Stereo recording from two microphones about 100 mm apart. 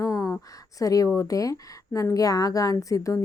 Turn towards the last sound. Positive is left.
turn(degrees=35)  # may be behind; listen again after turning